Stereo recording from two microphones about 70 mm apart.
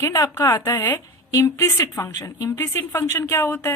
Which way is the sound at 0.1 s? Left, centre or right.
Left.